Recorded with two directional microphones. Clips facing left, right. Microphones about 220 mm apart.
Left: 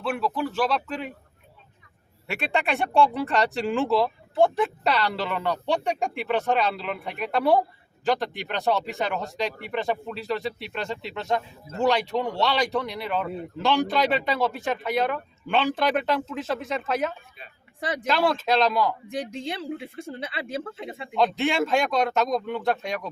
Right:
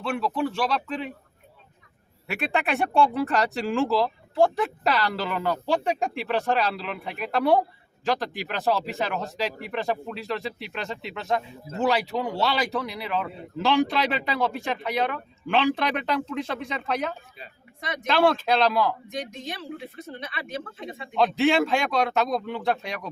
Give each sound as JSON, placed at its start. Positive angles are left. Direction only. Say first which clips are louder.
{"t": 0.0, "sound": "speech", "louder": "right 1 dB", "side_deg": 5}
{"t": 2.2, "sound": "speech", "louder": "even", "side_deg": 0}
{"t": 17.7, "sound": "speech", "louder": "left 4 dB", "side_deg": 30}
{"t": 18.0, "sound": "speech", "louder": "right 3 dB", "side_deg": 0}
{"t": 19.1, "sound": "speech", "louder": "left 3 dB", "side_deg": 30}
{"t": 21.2, "sound": "speech", "louder": "right 2 dB", "side_deg": 0}